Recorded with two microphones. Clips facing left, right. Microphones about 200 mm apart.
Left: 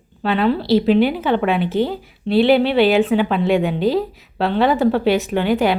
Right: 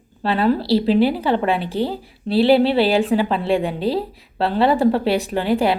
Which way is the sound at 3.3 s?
30° right (ahead or behind).